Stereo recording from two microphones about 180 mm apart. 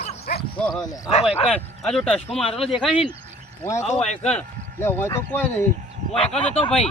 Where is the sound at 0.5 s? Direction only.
5° left (ahead or behind).